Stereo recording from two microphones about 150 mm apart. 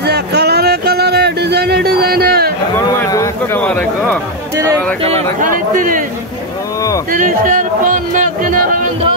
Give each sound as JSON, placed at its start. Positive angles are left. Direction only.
{"t": 0.0, "sound": "music", "side_deg": -90}
{"t": 3.5, "sound": "speech", "side_deg": 10}
{"t": 5.4, "sound": "speech", "side_deg": -65}
{"t": 7.1, "sound": "speech", "side_deg": -65}